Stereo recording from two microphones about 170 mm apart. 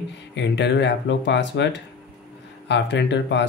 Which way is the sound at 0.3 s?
90° left.